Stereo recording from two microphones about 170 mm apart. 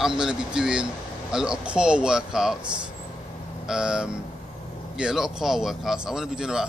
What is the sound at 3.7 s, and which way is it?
Speech, 5° right (ahead or behind).